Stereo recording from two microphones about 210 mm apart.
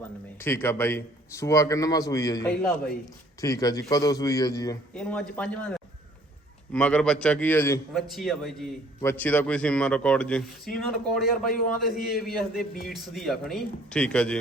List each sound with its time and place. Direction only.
0.3 s a man's voice: 10° left (ahead or behind)
2.5 s a man's voice: 5° left (ahead or behind)
3.4 s a man's voice: 15° left (ahead or behind)
4.9 s a man's voice: 5° left (ahead or behind)
6.7 s a man's voice: 5° left (ahead or behind)
7.9 s a man's voice: centre (ahead or behind)
9.0 s a man's voice: 10° left (ahead or behind)
12.9 s a man's voice: centre (ahead or behind)